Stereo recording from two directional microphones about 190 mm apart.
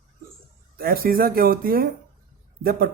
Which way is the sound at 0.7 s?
50° right (ahead or behind).